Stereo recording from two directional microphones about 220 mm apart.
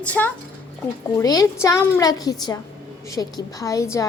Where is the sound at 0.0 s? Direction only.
5° left (ahead or behind).